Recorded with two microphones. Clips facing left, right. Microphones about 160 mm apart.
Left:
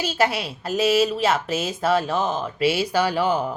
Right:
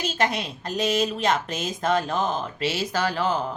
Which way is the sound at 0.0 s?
5° left (ahead or behind).